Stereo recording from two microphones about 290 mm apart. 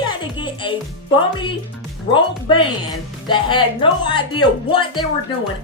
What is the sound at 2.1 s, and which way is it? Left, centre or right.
Speech, centre.